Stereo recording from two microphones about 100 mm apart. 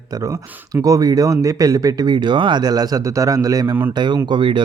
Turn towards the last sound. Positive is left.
turn(degrees=-55)  # may be behind; listen again after turning